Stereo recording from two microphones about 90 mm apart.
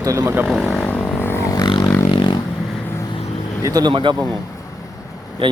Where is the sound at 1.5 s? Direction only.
50° left (ahead or behind).